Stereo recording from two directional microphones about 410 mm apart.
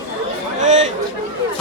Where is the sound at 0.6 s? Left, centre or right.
Centre.